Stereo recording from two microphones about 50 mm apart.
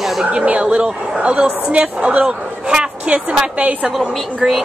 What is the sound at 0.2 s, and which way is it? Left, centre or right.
A man's voice, right.